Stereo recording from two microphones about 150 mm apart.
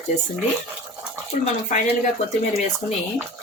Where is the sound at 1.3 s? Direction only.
55° left (ahead or behind).